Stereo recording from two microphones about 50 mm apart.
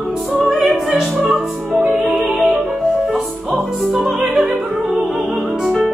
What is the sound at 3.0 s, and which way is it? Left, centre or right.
Opera, centre.